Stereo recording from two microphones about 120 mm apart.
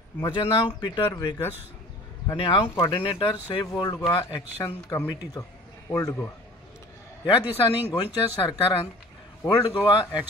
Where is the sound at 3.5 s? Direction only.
35° left (ahead or behind).